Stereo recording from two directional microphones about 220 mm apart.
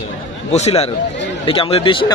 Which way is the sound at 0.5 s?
30° left (ahead or behind).